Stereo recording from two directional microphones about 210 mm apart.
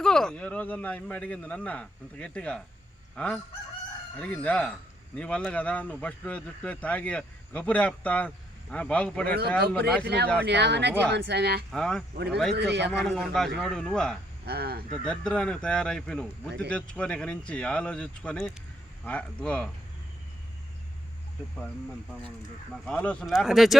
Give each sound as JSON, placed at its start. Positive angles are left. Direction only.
{"t": 0.0, "sound": "speech", "side_deg": 5}
{"t": 10.0, "sound": "speech", "side_deg": -50}
{"t": 11.7, "sound": "speech", "side_deg": 5}
{"t": 12.1, "sound": "a man's voice", "side_deg": -50}
{"t": 13.1, "sound": "speech", "side_deg": 0}
{"t": 14.4, "sound": "speech", "side_deg": -50}
{"t": 14.9, "sound": "speech", "side_deg": 5}
{"t": 22.9, "sound": "speech", "side_deg": 5}